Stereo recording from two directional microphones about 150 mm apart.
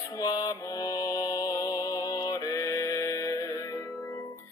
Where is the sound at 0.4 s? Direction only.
25° left (ahead or behind).